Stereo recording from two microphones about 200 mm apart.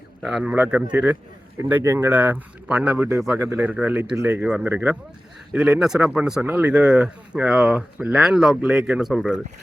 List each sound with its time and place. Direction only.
0.2 s speech: 5° right (ahead or behind)